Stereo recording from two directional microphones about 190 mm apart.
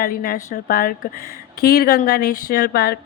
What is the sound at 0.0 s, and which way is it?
A woman's voice, 50° left (ahead or behind).